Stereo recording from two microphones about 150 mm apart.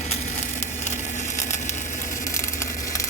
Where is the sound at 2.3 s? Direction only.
20° left (ahead or behind).